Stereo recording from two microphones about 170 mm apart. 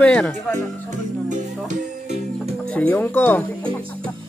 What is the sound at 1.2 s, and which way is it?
Music, 45° right (ahead or behind).